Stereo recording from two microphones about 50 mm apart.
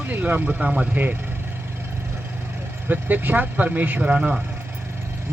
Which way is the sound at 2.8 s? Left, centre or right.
Right.